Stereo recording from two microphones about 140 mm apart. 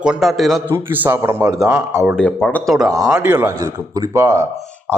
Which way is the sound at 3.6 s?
25° right (ahead or behind).